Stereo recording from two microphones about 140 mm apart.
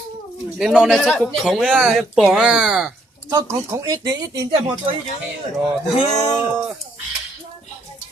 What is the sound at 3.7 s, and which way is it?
Speech, 25° right (ahead or behind).